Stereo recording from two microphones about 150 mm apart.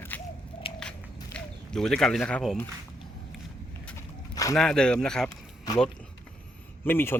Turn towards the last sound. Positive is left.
turn(degrees=15)  # may be behind; listen again after turning